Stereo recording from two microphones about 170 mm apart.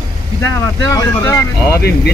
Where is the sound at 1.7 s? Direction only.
70° left (ahead or behind).